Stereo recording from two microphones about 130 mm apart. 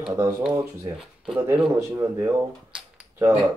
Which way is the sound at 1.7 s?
20° right (ahead or behind).